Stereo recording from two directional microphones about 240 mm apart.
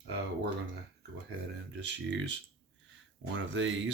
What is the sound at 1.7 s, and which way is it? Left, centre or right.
Speech, right.